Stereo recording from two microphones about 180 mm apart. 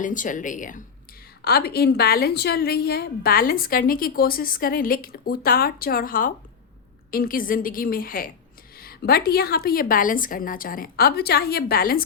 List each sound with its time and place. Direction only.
0.0 s a woman's voice: 45° left (ahead or behind)
1.5 s a woman's voice: 60° left (ahead or behind)